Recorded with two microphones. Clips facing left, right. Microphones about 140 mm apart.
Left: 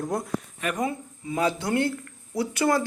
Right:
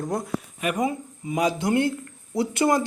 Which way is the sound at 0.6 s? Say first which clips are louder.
Right 4 dB; 10° right (ahead or behind).